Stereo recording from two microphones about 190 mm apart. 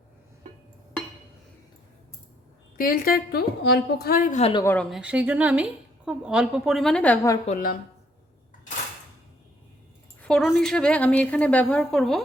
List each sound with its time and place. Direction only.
2.7 s a woman's voice: 50° left (ahead or behind)
4.5 s a woman's voice: 10° left (ahead or behind)
4.9 s a woman's voice: 5° right (ahead or behind)
7.4 s a woman's voice: 45° left (ahead or behind)
10.2 s a woman's voice: 5° left (ahead or behind)